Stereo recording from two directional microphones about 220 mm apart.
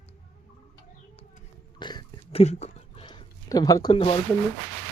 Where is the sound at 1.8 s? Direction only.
20° left (ahead or behind).